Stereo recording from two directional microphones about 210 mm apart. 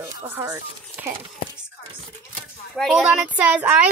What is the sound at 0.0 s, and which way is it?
Speech, 10° right (ahead or behind).